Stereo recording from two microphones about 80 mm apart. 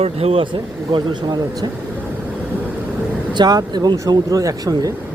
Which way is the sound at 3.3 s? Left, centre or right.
Right.